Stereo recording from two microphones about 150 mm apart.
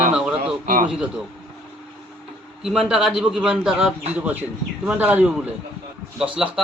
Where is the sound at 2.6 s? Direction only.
5° right (ahead or behind).